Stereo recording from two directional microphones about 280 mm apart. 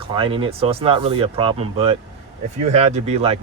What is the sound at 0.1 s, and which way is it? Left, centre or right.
Speech, centre.